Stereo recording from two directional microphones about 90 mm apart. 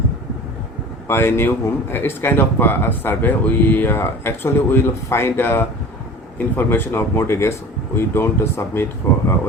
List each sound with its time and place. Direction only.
1.0 s speech: 25° left (ahead or behind)